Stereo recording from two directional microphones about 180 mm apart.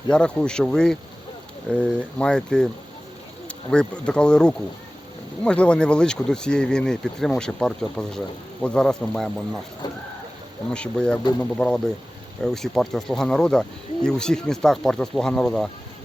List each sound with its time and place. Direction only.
0.1 s speech: 5° left (ahead or behind)
3.7 s speech: 5° left (ahead or behind)
9.8 s a sound: 20° left (ahead or behind)
10.7 s speech: 5° left (ahead or behind)